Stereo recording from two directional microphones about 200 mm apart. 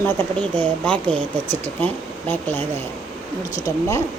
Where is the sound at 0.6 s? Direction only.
5° left (ahead or behind).